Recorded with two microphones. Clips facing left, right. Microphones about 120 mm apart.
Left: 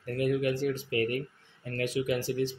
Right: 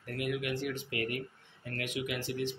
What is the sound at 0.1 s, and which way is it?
Speech, 35° left (ahead or behind).